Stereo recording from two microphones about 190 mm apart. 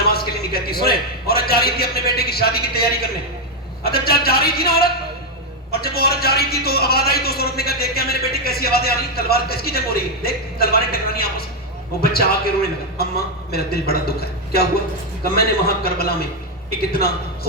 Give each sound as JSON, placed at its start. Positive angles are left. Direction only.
{"t": 0.0, "sound": "a man's voice", "side_deg": 55}